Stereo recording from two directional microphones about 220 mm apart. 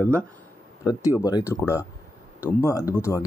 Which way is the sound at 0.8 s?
15° left (ahead or behind).